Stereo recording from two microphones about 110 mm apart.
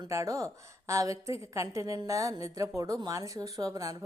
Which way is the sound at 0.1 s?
30° right (ahead or behind).